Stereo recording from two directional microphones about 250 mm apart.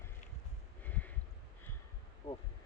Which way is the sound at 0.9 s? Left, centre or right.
Centre.